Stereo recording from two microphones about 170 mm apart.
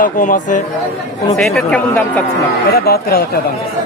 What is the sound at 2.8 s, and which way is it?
Speech, 65° left (ahead or behind).